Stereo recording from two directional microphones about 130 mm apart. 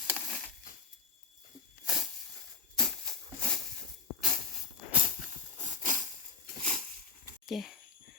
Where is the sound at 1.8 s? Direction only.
Centre (ahead or behind).